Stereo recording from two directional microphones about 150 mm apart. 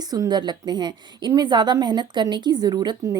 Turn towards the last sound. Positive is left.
turn(degrees=-25)  # may be behind; listen again after turning